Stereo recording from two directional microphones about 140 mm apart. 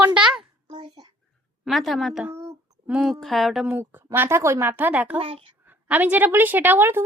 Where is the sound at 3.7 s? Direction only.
15° right (ahead or behind).